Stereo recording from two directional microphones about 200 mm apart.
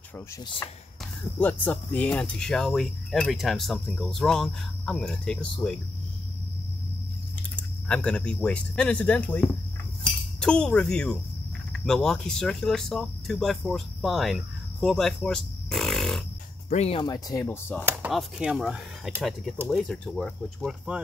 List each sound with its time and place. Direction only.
1.4 s speech: 10° left (ahead or behind)
7.5 s speech: 5° left (ahead or behind)
16.6 s speech: 35° left (ahead or behind)
17.0 s speech: 20° left (ahead or behind)
17.8 s speech: 5° right (ahead or behind)